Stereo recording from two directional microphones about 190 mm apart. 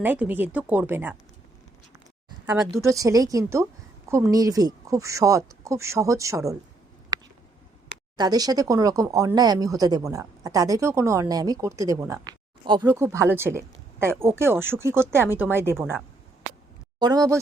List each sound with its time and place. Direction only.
0.0 s speech: 10° right (ahead or behind)
2.8 s speech: 15° right (ahead or behind)
7.1 s a sound: 20° right (ahead or behind)
8.1 s speech: 20° right (ahead or behind)
17.0 s speech: 20° right (ahead or behind)